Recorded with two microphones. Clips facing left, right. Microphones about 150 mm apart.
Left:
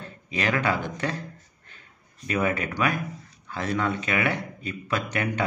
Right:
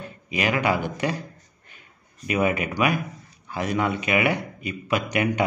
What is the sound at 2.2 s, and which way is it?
Speech, 15° right (ahead or behind).